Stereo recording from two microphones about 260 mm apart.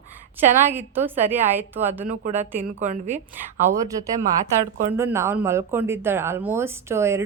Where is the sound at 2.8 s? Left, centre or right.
Right.